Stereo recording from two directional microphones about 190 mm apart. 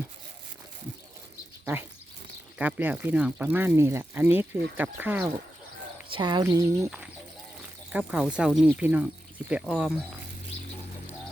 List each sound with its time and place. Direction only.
2.6 s speech: 10° right (ahead or behind)
6.1 s speech: 25° right (ahead or behind)
7.9 s speech: 5° right (ahead or behind)